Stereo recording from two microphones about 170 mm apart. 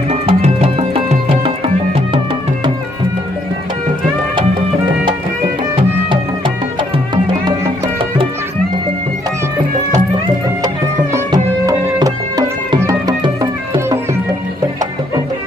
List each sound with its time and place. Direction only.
0.1 s music: 40° right (ahead or behind)
11.3 s music: 20° right (ahead or behind)